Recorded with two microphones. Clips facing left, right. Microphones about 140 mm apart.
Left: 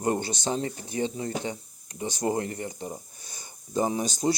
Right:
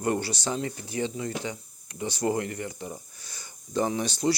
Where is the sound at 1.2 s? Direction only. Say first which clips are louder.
Left 1 dB; 30° left (ahead or behind).